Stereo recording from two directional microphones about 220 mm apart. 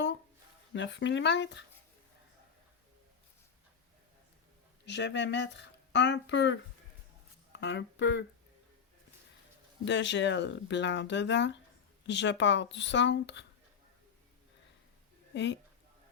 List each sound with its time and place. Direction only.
0.7 s speech: 55° left (ahead or behind)
4.9 s speech: 50° left (ahead or behind)
9.8 s speech: 55° left (ahead or behind)
15.3 s a woman's voice: 55° left (ahead or behind)